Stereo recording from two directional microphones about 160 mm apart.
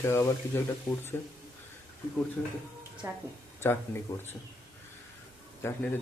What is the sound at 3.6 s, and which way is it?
Speech, 15° left (ahead or behind).